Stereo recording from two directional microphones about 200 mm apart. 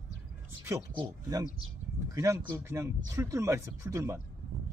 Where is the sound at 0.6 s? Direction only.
15° right (ahead or behind).